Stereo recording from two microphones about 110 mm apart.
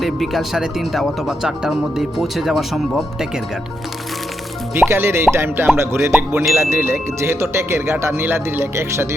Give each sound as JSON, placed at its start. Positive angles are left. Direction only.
{"t": 0.0, "sound": "speech", "side_deg": 0}
{"t": 4.7, "sound": "speech", "side_deg": -25}